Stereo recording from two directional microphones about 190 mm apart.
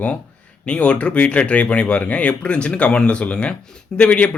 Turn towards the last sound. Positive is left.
turn(degrees=5)  # may be behind; listen again after turning